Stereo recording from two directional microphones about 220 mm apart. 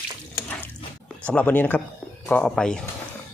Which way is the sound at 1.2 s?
5° left (ahead or behind).